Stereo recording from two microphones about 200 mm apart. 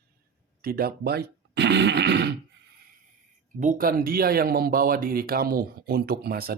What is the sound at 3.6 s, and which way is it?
Speech, 40° right (ahead or behind).